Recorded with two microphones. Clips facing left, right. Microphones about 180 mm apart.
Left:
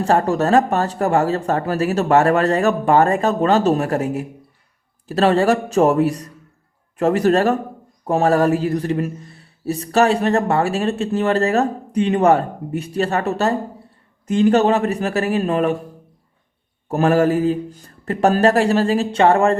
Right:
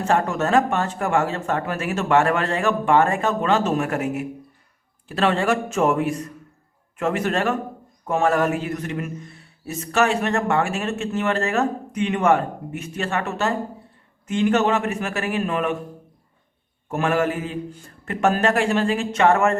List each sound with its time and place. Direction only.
0.0 s speech: 35° left (ahead or behind)
16.9 s speech: 35° left (ahead or behind)